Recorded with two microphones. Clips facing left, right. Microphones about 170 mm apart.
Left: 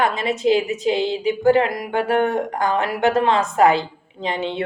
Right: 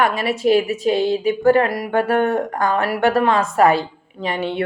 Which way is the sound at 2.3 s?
20° left (ahead or behind).